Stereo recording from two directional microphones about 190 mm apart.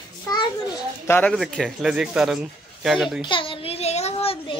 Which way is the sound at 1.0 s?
10° left (ahead or behind).